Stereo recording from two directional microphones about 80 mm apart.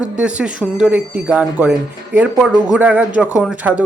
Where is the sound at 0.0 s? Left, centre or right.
Centre.